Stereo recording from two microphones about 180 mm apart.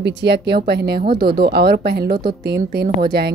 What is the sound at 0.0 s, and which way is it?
A woman's voice, 70° right (ahead or behind).